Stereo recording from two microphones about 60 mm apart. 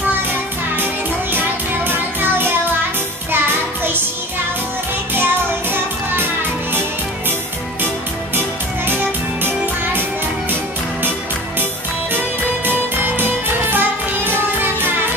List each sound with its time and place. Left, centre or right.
1.9 s music: right
5.1 s music: right
8.4 s music: right
10.5 s music: right